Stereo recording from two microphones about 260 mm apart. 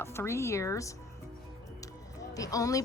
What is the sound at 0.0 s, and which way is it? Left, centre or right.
Speech, centre.